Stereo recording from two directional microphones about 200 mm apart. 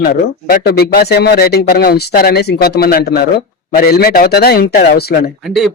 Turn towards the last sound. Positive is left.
turn(degrees=0)  # may be behind; listen again after turning